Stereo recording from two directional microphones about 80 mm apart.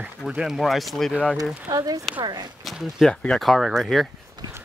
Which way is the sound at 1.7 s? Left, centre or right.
Right.